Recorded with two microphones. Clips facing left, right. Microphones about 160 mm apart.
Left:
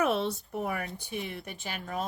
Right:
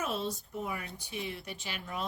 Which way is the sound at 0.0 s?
65° left (ahead or behind).